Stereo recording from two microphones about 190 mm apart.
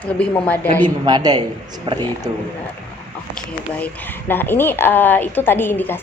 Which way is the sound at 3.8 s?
10° left (ahead or behind).